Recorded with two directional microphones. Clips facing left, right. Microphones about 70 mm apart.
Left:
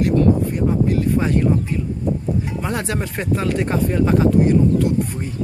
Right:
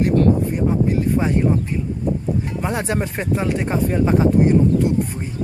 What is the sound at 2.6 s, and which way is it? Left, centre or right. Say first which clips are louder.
Speech: right 1 dB; centre.